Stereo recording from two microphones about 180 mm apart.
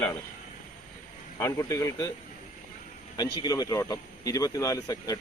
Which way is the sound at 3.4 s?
20° left (ahead or behind).